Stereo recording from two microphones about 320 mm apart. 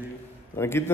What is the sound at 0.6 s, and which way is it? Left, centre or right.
Speech, centre.